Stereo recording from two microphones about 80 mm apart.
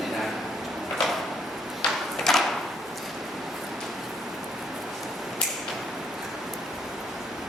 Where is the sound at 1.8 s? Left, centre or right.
Centre.